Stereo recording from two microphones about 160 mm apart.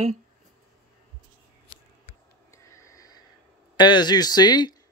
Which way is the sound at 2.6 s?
20° left (ahead or behind).